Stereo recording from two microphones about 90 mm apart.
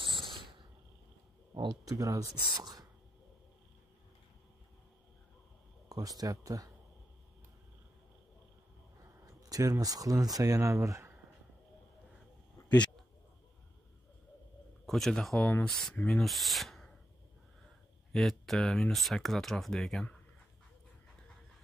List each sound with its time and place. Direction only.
1.5 s speech: 60° right (ahead or behind)
1.9 s speech: 40° right (ahead or behind)
2.4 s speech: 50° right (ahead or behind)
5.9 s speech: 40° right (ahead or behind)
9.2 s speech: 40° right (ahead or behind)
12.6 s a sound: 15° left (ahead or behind)
14.9 s speech: 5° left (ahead or behind)
18.1 s speech: 5° left (ahead or behind)